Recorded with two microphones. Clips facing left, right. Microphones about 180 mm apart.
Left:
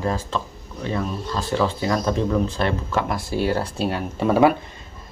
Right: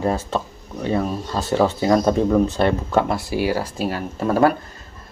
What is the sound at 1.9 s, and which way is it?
Speech, 45° right (ahead or behind).